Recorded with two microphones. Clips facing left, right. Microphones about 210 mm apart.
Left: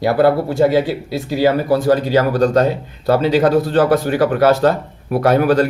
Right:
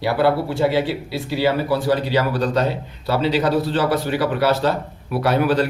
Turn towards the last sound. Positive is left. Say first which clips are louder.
# left 5 dB
turn(degrees=45)  # may be behind; listen again after turning